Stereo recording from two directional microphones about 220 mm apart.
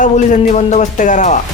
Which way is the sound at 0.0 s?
35° left (ahead or behind).